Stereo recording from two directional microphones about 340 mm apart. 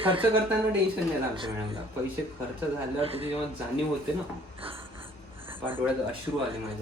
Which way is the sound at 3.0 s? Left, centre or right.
Centre.